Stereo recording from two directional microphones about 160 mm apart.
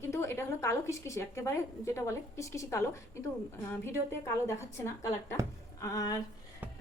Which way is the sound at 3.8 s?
15° left (ahead or behind).